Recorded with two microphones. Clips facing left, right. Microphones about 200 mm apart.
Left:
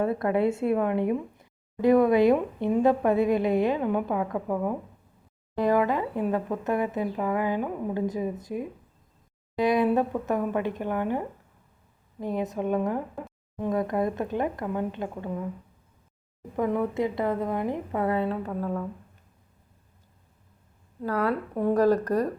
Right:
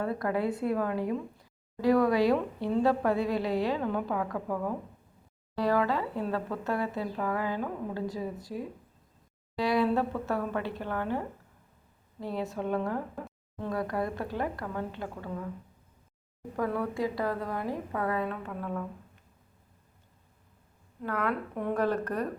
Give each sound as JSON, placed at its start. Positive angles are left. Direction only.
{"t": 0.0, "sound": "a woman's voice", "side_deg": 20}
{"t": 16.6, "sound": "a woman's voice", "side_deg": 20}
{"t": 21.0, "sound": "speech", "side_deg": 35}